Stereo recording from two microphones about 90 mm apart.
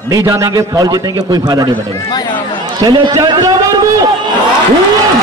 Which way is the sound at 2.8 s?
45° right (ahead or behind).